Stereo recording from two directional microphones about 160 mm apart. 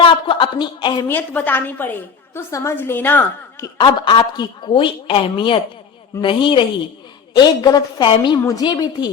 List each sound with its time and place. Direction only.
0.0 s a woman's voice: 30° left (ahead or behind)
1.0 s a woman's voice: 10° left (ahead or behind)
3.8 s a woman's voice: 30° left (ahead or behind)